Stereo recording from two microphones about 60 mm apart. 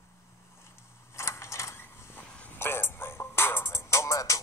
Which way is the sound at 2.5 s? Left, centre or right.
Left.